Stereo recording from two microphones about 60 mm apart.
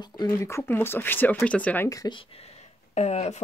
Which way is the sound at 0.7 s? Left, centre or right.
Left.